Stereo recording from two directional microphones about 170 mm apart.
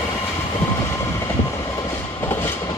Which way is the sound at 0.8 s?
15° left (ahead or behind).